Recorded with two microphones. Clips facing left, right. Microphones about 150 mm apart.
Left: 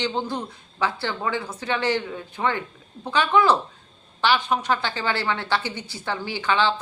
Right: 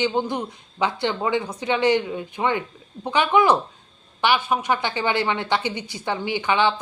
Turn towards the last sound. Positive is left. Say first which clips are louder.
# right 2 dB
turn(degrees=-15)  # may be behind; listen again after turning